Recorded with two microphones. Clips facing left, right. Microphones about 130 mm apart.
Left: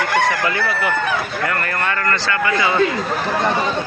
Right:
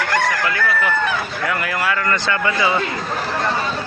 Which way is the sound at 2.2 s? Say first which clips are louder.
Left 1 dB; 20° right (ahead or behind).